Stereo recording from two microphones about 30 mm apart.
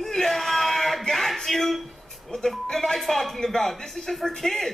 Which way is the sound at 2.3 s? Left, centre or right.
Left.